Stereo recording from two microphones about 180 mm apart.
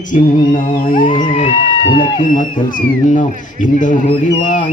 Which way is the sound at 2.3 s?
45° left (ahead or behind).